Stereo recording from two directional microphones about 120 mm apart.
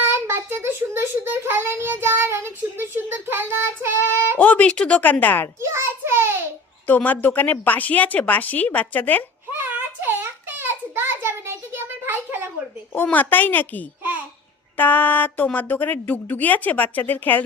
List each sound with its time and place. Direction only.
0.0 s child singing: 20° right (ahead or behind)
4.4 s a woman's voice: 10° left (ahead or behind)
5.6 s a sound: 20° right (ahead or behind)
6.8 s a woman's voice: 15° left (ahead or behind)
9.5 s a sound: 15° right (ahead or behind)
12.9 s a woman's voice: 15° left (ahead or behind)